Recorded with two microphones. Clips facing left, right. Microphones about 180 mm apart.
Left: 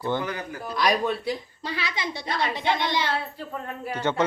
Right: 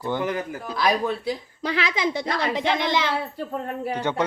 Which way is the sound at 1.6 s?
90° right.